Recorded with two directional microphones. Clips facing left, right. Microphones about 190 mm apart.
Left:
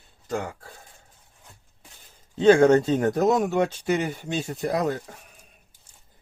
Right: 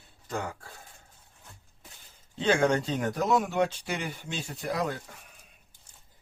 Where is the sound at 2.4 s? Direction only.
45° left (ahead or behind).